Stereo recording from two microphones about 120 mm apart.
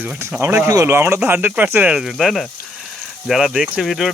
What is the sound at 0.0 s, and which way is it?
Speech, 20° right (ahead or behind).